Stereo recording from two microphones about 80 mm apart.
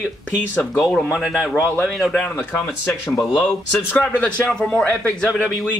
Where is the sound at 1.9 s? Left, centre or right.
Centre.